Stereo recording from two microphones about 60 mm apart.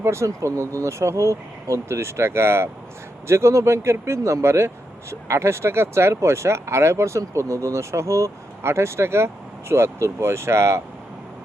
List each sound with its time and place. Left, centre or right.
0.0 s speech: right